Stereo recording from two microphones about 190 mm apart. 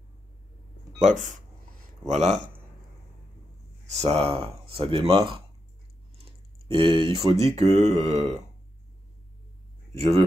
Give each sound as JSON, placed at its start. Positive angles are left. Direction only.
{"t": 1.0, "sound": "speech", "side_deg": -40}
{"t": 3.8, "sound": "speech", "side_deg": -35}
{"t": 6.7, "sound": "speech", "side_deg": -30}
{"t": 9.9, "sound": "speech", "side_deg": -35}